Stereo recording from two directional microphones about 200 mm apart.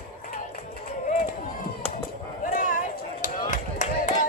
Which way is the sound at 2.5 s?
40° left (ahead or behind).